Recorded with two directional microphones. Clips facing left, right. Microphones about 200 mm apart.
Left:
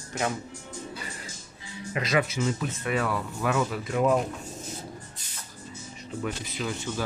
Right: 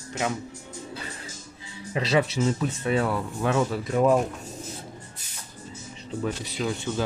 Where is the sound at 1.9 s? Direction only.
30° right (ahead or behind).